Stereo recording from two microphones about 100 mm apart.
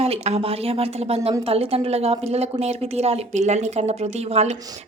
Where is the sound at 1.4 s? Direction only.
75° right (ahead or behind).